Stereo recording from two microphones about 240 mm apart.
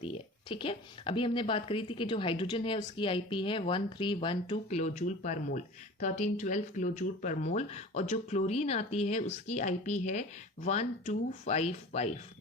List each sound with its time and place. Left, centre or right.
0.0 s speech: left
4.8 s speech: left